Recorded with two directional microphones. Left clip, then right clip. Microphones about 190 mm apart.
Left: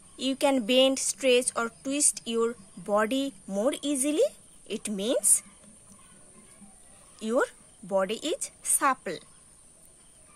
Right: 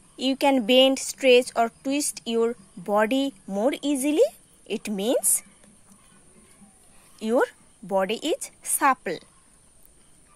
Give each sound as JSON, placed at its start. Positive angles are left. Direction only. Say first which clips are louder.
{"t": 0.2, "sound": "a woman's voice", "louder": "right 4 dB", "side_deg": -20}
{"t": 7.2, "sound": "a woman's voice", "louder": "right 4 dB", "side_deg": -25}